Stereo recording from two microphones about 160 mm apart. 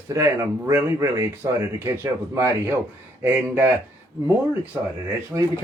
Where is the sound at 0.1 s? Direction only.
20° right (ahead or behind).